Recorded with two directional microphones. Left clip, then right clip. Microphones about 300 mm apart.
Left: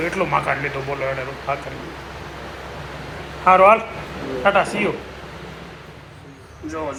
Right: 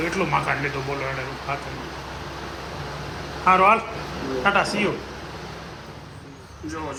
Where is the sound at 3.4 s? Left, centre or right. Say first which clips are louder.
Left 4 dB; centre.